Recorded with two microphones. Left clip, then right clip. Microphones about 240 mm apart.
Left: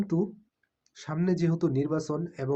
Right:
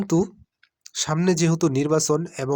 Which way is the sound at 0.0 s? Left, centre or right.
Right.